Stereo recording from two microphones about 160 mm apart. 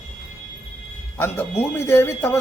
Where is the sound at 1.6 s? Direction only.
15° left (ahead or behind).